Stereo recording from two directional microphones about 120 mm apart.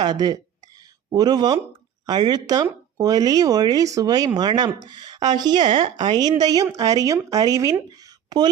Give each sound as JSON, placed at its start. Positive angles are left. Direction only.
{"t": 0.0, "sound": "speech", "side_deg": -35}
{"t": 0.8, "sound": "a sound", "side_deg": -35}
{"t": 2.0, "sound": "speech", "side_deg": -35}